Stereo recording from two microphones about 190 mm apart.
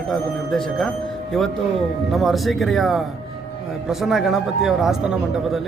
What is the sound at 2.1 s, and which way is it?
A man's voice, centre (ahead or behind).